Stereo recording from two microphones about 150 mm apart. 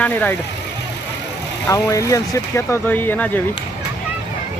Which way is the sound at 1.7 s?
20° left (ahead or behind).